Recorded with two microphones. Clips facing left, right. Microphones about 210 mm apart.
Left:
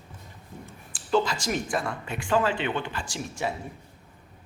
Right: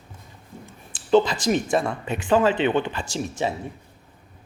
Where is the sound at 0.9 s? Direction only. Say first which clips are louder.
Right 6 dB; 20° right (ahead or behind).